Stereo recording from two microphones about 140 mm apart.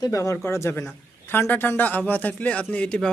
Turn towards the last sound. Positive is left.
turn(degrees=10)  # may be behind; listen again after turning